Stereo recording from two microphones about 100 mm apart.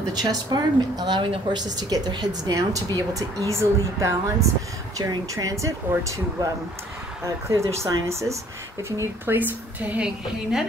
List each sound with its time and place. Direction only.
0.1 s a woman's voice: 40° right (ahead or behind)
7.4 s a woman's voice: 30° right (ahead or behind); by 10.6 s 10° right (ahead or behind)